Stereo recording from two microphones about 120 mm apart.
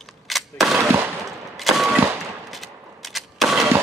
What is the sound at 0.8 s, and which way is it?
Machine gun, 20° right (ahead or behind).